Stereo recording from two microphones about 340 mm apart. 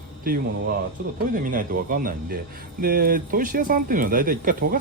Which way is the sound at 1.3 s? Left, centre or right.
Right.